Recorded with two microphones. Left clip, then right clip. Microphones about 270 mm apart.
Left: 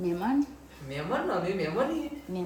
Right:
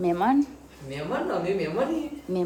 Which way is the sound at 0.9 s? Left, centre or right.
Centre.